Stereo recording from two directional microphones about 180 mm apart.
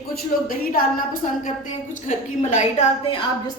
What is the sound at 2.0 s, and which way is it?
Speech, 40° left (ahead or behind).